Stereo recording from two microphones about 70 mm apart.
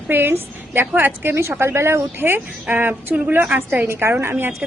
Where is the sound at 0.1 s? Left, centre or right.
Right.